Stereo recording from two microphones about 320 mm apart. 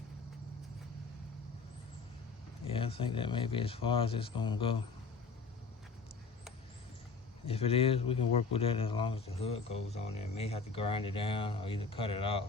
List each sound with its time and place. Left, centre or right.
2.7 s a man's voice: centre
7.4 s a man's voice: centre